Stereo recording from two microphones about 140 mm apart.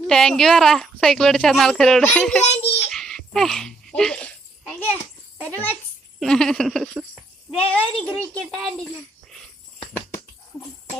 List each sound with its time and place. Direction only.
0.1 s a woman's voice: 5° left (ahead or behind)
2.4 s a child's voice: 50° left (ahead or behind)
2.9 s a sound: 5° left (ahead or behind)
5.4 s a child's voice: 10° left (ahead or behind)